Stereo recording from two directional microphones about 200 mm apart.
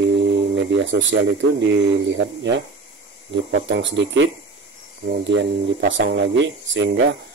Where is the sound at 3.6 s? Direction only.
65° right (ahead or behind).